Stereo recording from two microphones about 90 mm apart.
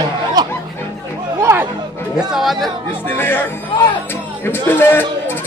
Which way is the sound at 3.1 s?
25° left (ahead or behind).